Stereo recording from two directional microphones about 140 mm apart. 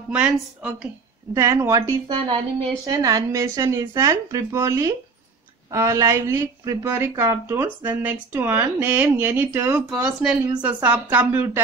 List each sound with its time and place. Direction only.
0.1 s a woman's voice: 10° right (ahead or behind)
1.3 s a woman's voice: 20° right (ahead or behind)